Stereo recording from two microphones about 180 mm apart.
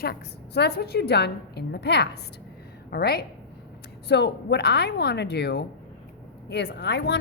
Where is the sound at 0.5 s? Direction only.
65° left (ahead or behind).